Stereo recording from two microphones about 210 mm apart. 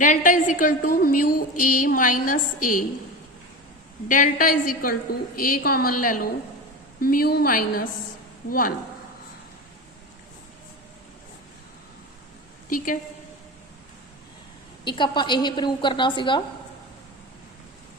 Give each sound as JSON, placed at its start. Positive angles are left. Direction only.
{"t": 0.0, "sound": "a woman's voice", "side_deg": 40}
{"t": 4.1, "sound": "a woman's voice", "side_deg": 40}
{"t": 12.7, "sound": "a woman's voice", "side_deg": 40}
{"t": 14.8, "sound": "a woman's voice", "side_deg": 20}